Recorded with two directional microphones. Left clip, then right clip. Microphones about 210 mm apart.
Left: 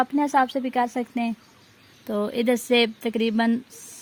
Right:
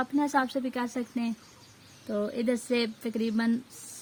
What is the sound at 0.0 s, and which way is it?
A woman's voice, 40° left (ahead or behind).